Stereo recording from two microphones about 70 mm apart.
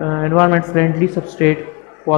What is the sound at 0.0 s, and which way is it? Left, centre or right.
A man's voice, centre.